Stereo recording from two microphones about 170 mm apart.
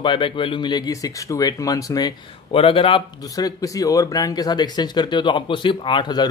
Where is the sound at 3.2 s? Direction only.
20° left (ahead or behind).